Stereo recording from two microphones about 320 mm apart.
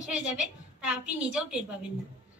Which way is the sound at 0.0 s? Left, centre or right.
Centre.